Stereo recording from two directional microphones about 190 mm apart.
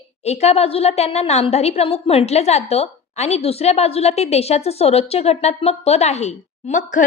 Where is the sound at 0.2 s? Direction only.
35° left (ahead or behind).